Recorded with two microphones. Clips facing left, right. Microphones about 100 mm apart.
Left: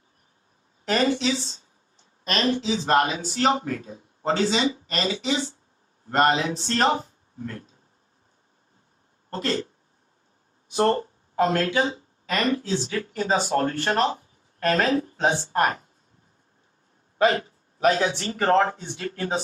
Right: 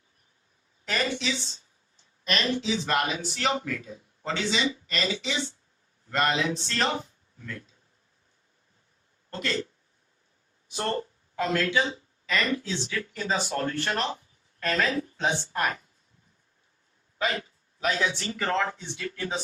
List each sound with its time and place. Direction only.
0.9 s speech: 40° left (ahead or behind)
9.3 s speech: 40° left (ahead or behind)
10.7 s speech: 45° left (ahead or behind)
17.2 s a man's voice: 40° left (ahead or behind)